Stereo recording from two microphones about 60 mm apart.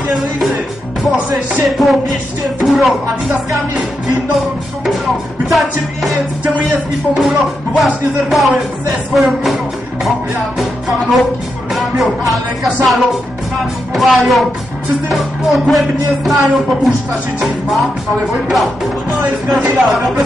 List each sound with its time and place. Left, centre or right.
1.6 s music: centre
4.8 s music: centre
19.8 s music: centre